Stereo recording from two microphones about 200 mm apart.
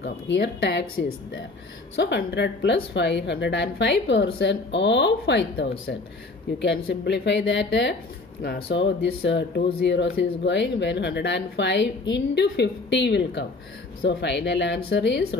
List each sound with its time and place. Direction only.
0.0 s speech: 60° left (ahead or behind)